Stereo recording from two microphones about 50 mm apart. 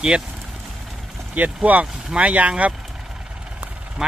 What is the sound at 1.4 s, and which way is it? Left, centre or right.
Speech, right.